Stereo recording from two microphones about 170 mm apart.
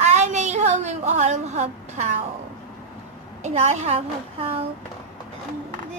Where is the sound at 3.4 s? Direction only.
40° right (ahead or behind).